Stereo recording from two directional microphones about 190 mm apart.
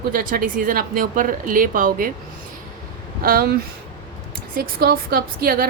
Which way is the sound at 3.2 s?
50° right (ahead or behind).